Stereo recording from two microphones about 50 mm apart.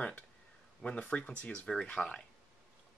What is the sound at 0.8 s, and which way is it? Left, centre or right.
Speech, left.